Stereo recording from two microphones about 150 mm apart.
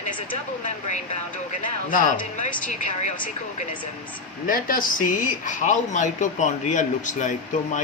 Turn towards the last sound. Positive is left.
turn(degrees=55)  # may be behind; listen again after turning